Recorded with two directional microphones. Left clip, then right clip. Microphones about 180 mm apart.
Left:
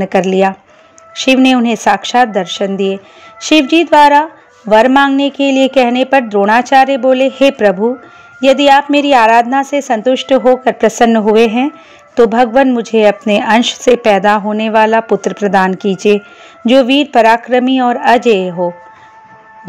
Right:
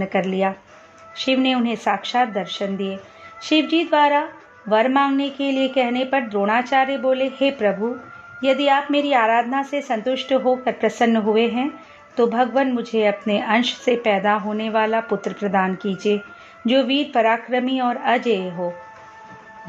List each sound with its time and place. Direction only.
0.0 s speech: 40° left (ahead or behind)